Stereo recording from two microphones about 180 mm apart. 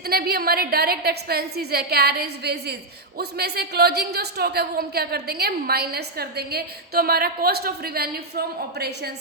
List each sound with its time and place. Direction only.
0.0 s a woman's voice: 60° right (ahead or behind)